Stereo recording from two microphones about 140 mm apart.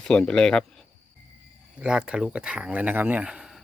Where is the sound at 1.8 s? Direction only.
5° right (ahead or behind).